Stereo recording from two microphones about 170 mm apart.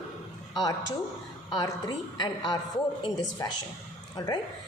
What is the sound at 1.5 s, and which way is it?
A woman's voice, 20° left (ahead or behind).